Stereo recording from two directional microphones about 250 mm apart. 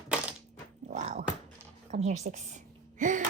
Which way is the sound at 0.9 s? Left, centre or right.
Right.